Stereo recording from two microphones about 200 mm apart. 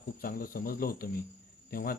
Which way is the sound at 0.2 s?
45° left (ahead or behind).